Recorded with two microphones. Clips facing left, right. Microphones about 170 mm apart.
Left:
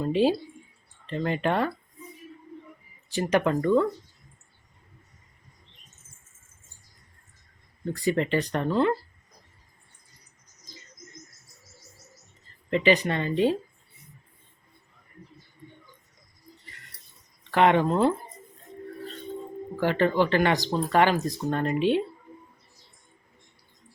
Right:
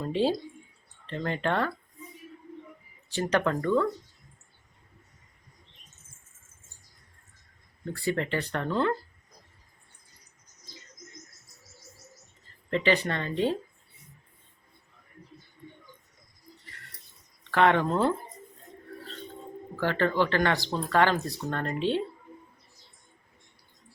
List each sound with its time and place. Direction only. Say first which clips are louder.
0.0 s speech: left 4 dB; 10° left (ahead or behind)
3.1 s speech: left 3 dB; 15° left (ahead or behind)
7.9 s speech: left 4 dB; 15° left (ahead or behind)
12.7 s speech: left 3 dB; 15° left (ahead or behind)
17.5 s speech: left 2 dB; 15° left (ahead or behind)
19.8 s speech: left 3 dB; 15° left (ahead or behind)